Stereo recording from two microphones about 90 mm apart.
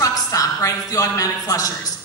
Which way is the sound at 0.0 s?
40° left (ahead or behind).